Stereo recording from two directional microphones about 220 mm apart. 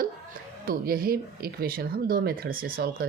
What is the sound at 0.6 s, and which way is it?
Speech, 40° right (ahead or behind).